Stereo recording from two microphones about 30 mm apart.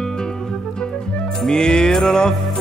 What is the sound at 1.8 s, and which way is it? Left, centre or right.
Music, centre.